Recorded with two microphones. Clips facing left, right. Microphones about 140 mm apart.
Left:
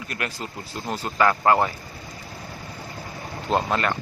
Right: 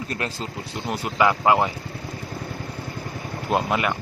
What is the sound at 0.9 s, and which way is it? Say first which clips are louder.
Speech: right 1 dB; 15° right (ahead or behind).